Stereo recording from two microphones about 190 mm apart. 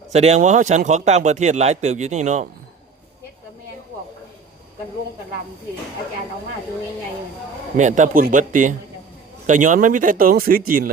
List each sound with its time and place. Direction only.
0.1 s speech: 35° right (ahead or behind)
7.8 s speech: 40° right (ahead or behind)